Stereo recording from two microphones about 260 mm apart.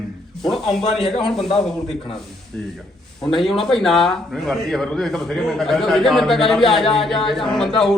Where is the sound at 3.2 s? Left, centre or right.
Centre.